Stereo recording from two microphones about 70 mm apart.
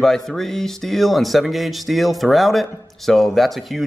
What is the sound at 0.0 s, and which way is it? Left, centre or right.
Speech, centre.